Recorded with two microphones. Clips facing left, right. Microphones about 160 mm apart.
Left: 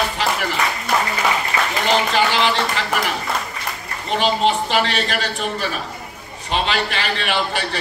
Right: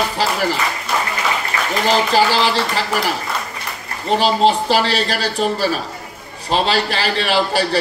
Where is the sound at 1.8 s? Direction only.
35° right (ahead or behind).